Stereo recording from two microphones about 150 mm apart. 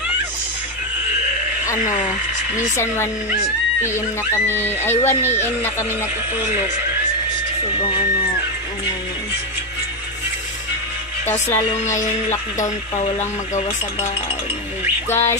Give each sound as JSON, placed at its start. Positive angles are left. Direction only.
{"t": 1.9, "sound": "speech", "side_deg": 55}
{"t": 4.5, "sound": "speech", "side_deg": 15}
{"t": 11.2, "sound": "speech", "side_deg": 15}
{"t": 11.7, "sound": "music", "side_deg": 50}
{"t": 15.0, "sound": "speech", "side_deg": 15}